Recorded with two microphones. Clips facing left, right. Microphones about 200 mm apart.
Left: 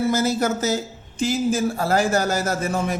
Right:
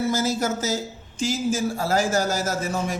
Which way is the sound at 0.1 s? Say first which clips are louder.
Left 3 dB; 60° left (ahead or behind).